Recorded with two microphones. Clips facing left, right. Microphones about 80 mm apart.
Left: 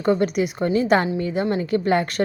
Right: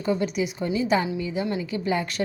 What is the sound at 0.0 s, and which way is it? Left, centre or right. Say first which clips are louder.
A woman's voice: left 5 dB; left.